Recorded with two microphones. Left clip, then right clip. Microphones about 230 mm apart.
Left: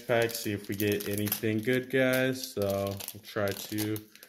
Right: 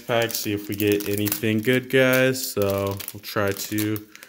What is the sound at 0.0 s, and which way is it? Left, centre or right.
Speech, right.